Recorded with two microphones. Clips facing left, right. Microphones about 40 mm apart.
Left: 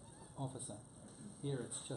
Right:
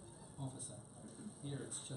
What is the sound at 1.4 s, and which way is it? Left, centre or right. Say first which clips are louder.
Speech: left 6 dB; centre.